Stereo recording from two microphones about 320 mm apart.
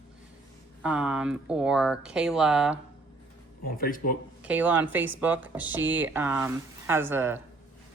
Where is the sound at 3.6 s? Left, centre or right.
Left.